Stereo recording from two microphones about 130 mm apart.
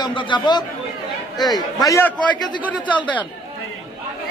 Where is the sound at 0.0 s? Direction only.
40° left (ahead or behind).